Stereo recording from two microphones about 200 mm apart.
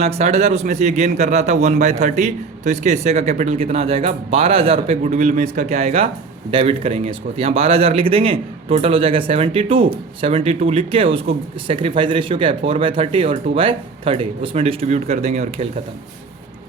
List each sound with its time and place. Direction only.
0.0 s a man's voice: 30° right (ahead or behind)